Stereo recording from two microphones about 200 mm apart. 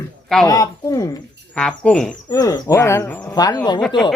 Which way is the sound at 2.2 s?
20° left (ahead or behind).